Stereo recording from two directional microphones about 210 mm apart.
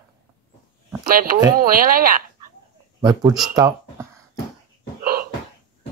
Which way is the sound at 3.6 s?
15° right (ahead or behind).